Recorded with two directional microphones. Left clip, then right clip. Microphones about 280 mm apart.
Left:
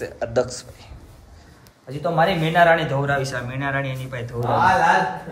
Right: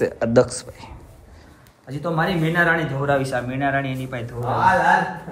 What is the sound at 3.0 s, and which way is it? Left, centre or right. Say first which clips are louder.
A man's voice: right 3 dB; centre.